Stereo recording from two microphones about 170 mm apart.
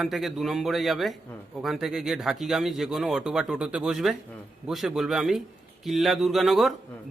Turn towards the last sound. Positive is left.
turn(degrees=0)  # may be behind; listen again after turning